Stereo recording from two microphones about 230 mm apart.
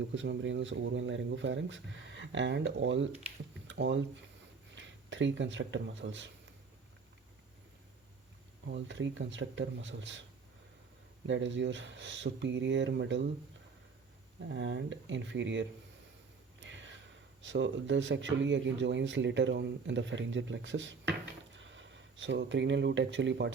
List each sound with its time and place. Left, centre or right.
0.1 s speech: right
8.6 s speech: right
11.3 s speech: right
14.5 s speech: right
16.6 s a sound: right
17.4 s speech: right